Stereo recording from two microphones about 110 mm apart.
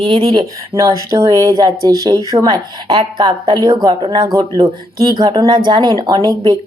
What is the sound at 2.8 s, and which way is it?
A woman's voice, 50° right (ahead or behind).